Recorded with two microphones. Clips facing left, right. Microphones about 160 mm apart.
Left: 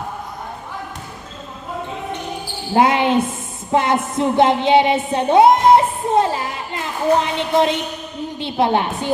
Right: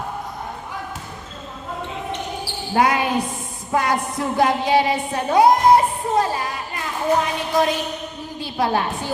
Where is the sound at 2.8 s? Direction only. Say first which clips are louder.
Left 4 dB; 25° left (ahead or behind).